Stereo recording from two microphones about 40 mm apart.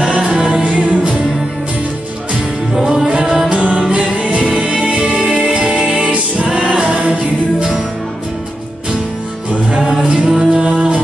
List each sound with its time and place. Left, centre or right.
0.1 s music: right
2.7 s music: centre; by 6.1 s right
6.3 s music: centre
9.5 s music: right
10.5 s music: right